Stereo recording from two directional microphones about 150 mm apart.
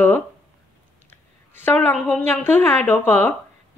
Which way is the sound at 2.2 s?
15° left (ahead or behind).